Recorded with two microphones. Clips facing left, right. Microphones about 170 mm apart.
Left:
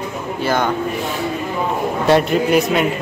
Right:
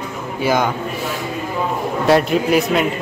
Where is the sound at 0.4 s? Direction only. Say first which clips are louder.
Right 2 dB; 10° right (ahead or behind).